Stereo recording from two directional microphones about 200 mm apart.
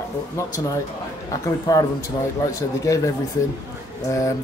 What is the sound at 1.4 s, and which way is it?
Speech, 20° left (ahead or behind).